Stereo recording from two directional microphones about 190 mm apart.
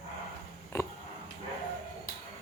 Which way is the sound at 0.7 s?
15° left (ahead or behind).